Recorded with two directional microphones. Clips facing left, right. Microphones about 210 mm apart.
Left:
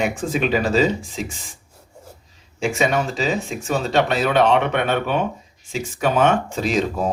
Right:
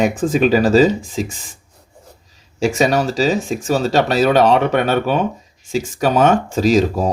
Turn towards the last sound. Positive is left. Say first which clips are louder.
# right 6 dB
turn(degrees=-40)  # may be behind; listen again after turning